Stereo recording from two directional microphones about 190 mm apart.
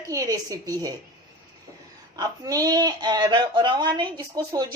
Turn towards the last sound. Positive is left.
turn(degrees=-20)  # may be behind; listen again after turning